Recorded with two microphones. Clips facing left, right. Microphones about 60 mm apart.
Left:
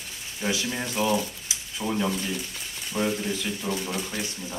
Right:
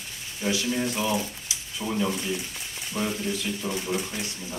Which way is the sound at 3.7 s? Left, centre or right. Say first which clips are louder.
Left 2 dB; centre.